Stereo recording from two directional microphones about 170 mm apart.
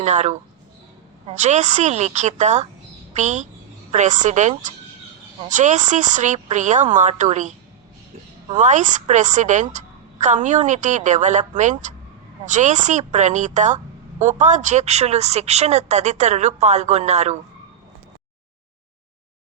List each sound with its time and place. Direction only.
0.0 s a woman's voice: 40° right (ahead or behind)
8.5 s a woman's voice: 45° right (ahead or behind)